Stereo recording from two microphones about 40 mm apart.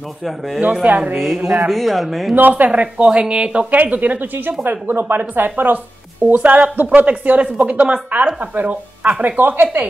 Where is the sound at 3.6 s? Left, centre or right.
Right.